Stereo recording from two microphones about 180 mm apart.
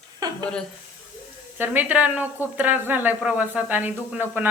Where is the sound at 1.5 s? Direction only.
10° right (ahead or behind).